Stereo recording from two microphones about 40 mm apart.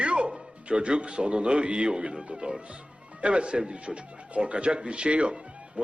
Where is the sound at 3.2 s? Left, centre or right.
Right.